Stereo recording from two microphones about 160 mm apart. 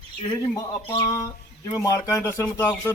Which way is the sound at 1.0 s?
20° left (ahead or behind).